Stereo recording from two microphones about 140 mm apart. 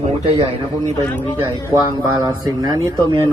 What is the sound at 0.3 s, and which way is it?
Speech, 35° right (ahead or behind).